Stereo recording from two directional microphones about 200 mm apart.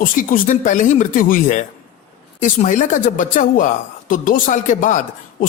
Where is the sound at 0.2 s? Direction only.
40° left (ahead or behind).